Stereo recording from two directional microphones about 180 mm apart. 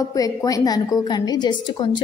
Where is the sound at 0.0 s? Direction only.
20° left (ahead or behind).